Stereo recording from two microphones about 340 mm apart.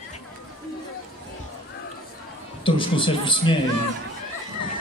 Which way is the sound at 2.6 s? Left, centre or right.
Centre.